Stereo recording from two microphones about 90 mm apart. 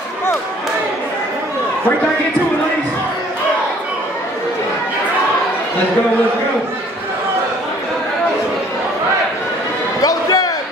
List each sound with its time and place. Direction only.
10.0 s music: 45° left (ahead or behind)